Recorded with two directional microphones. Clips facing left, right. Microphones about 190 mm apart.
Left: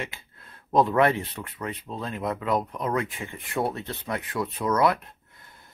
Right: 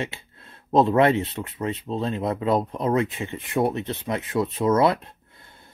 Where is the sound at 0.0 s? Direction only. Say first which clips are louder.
Right 5 dB; 25° right (ahead or behind).